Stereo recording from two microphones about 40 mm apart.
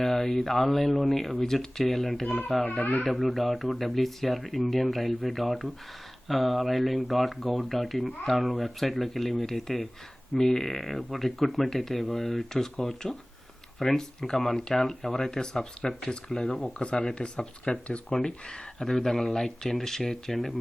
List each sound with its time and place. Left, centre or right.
0.0 s speech: centre